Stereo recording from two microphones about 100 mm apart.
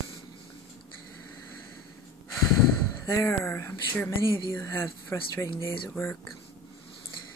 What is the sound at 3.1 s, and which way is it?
Speech, 25° left (ahead or behind).